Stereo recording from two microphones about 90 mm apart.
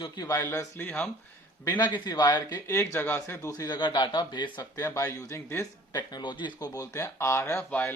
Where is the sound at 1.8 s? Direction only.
55° left (ahead or behind).